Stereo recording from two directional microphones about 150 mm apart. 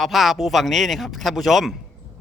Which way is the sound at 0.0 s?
Centre (ahead or behind).